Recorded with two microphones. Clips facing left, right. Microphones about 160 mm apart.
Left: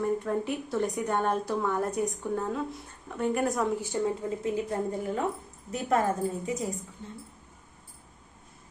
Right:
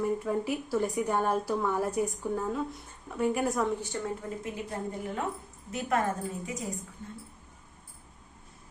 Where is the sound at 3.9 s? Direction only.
20° left (ahead or behind).